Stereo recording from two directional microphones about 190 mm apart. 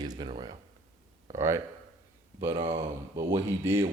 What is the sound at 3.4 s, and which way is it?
Speech, 15° right (ahead or behind).